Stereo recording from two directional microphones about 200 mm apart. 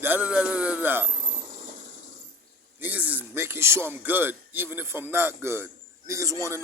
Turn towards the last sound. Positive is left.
turn(degrees=-15)  # may be behind; listen again after turning